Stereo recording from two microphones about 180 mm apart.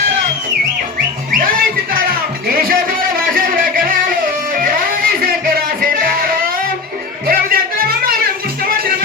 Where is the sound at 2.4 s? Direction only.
55° right (ahead or behind).